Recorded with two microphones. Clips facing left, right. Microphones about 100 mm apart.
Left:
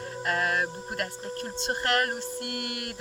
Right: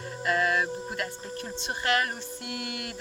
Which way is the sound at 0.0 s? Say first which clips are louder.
Right 2 dB; 45° left (ahead or behind).